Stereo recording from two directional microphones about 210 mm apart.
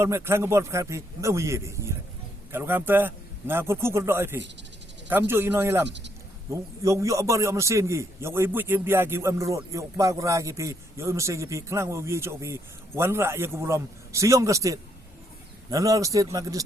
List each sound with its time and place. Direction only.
0.0 s a man's voice: 10° right (ahead or behind)